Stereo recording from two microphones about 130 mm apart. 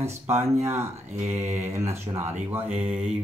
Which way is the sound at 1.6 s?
20° right (ahead or behind).